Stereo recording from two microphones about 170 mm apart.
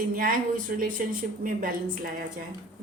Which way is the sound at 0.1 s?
55° right (ahead or behind).